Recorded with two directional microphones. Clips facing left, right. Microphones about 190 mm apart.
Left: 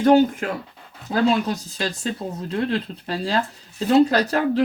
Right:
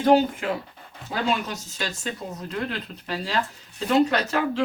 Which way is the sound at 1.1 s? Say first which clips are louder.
Left 7 dB; 35° left (ahead or behind).